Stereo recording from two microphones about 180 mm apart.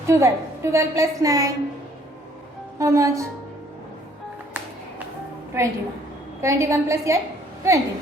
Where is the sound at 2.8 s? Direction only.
15° right (ahead or behind).